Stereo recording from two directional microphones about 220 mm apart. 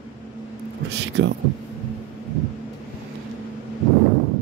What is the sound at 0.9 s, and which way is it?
Speech, 50° right (ahead or behind).